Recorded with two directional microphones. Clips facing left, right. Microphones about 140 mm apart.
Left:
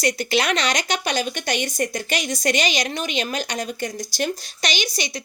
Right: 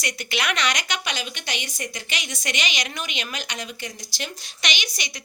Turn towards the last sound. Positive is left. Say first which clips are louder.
# left 7 dB
turn(degrees=30)  # may be behind; listen again after turning